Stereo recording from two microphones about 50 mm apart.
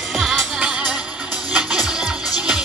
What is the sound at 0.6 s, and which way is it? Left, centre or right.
Music, centre.